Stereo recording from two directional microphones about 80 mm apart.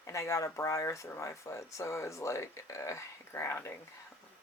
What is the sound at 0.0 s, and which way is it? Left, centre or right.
Speech, left.